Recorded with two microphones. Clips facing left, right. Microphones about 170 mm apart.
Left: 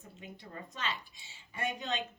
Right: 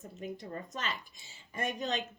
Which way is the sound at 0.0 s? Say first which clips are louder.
Right 8 dB; 45° right (ahead or behind).